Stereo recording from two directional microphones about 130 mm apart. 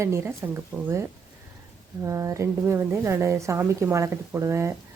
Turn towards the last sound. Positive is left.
turn(degrees=-20)  # may be behind; listen again after turning